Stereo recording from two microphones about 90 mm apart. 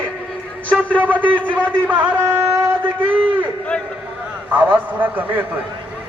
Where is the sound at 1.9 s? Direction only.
20° right (ahead or behind).